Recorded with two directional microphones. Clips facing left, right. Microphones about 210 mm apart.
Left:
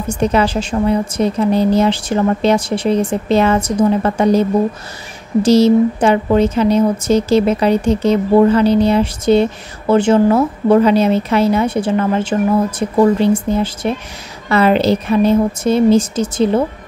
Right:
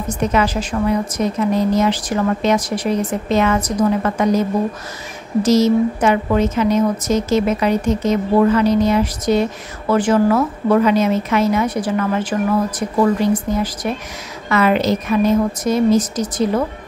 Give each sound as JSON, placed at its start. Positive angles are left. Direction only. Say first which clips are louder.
{"t": 0.1, "sound": "a woman's voice", "louder": "left 3 dB", "side_deg": 30}